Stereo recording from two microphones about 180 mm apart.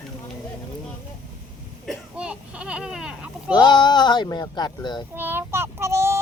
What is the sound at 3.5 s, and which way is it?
Speech, 25° left (ahead or behind).